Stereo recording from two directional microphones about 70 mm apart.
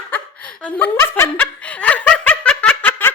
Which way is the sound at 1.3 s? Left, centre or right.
Centre.